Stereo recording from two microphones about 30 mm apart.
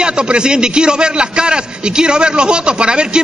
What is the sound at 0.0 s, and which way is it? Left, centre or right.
A man's voice, right.